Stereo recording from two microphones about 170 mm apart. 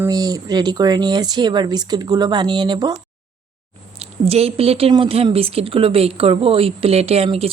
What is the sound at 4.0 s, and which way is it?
A woman's voice, 35° right (ahead or behind).